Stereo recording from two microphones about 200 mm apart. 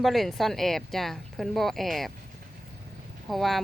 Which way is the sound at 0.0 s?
Centre (ahead or behind).